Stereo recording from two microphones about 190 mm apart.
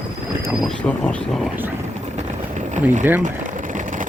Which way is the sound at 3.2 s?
40° right (ahead or behind).